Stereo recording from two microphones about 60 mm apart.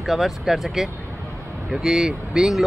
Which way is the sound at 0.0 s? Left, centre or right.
Centre.